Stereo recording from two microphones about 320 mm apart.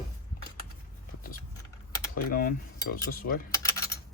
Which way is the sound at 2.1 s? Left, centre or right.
Left.